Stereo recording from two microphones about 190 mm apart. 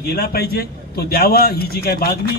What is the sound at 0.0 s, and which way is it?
A man's voice, 55° left (ahead or behind).